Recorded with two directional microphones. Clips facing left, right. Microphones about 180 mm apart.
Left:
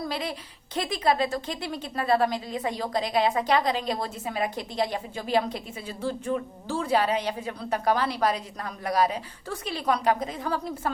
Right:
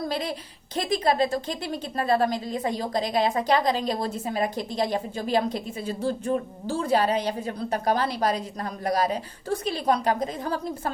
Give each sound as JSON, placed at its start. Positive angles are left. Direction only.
{"t": 0.1, "sound": "a woman's voice", "side_deg": -40}